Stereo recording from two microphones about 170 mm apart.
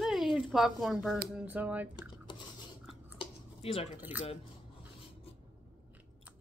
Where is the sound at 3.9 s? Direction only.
10° right (ahead or behind).